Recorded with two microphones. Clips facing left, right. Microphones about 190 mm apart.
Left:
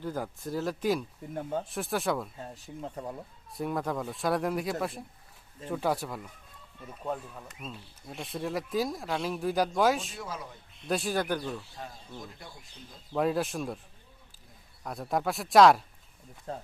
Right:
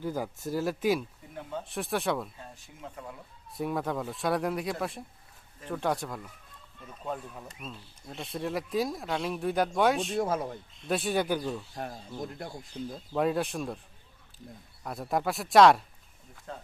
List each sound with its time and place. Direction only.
0.0 s speech: 5° right (ahead or behind)
1.4 s speech: 45° left (ahead or behind)
1.6 s speech: centre (ahead or behind)
2.6 s speech: 35° left (ahead or behind)
3.5 s speech: centre (ahead or behind)
7.6 s speech: 5° left (ahead or behind)
10.2 s speech: 50° right (ahead or behind)
10.8 s speech: centre (ahead or behind)
11.3 s speech: 15° right (ahead or behind)
11.8 s speech: 55° right (ahead or behind)
13.1 s speech: centre (ahead or behind)
14.8 s speech: centre (ahead or behind)
16.5 s speech: 35° left (ahead or behind)